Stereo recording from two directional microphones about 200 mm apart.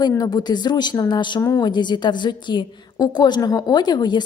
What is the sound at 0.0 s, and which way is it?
Speech, 20° left (ahead or behind).